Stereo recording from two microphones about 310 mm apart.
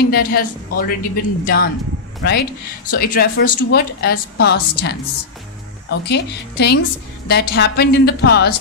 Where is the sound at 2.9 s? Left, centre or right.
Left.